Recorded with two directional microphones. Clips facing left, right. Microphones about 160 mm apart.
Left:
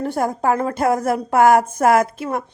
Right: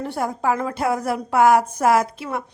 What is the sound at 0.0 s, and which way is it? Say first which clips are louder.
A woman's voice: left 3 dB; 45° left (ahead or behind).